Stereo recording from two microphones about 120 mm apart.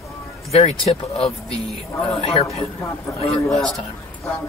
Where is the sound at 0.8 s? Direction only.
50° left (ahead or behind).